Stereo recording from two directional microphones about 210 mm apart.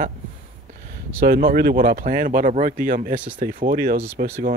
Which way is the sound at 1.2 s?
45° right (ahead or behind).